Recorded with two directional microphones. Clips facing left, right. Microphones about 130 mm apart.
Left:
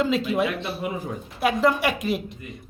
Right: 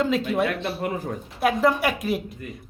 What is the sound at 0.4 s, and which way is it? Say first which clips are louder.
Speech: right 1 dB; 50° right (ahead or behind).